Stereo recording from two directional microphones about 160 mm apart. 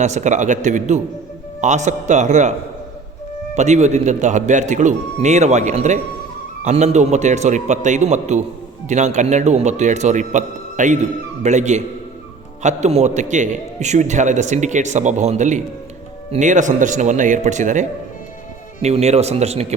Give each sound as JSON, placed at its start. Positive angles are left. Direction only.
{"t": 0.0, "sound": "a man's voice", "side_deg": -50}